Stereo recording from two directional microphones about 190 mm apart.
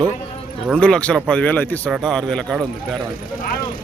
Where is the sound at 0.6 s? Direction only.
5° left (ahead or behind).